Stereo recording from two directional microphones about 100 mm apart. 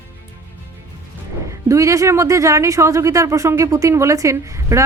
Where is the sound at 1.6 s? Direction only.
30° right (ahead or behind).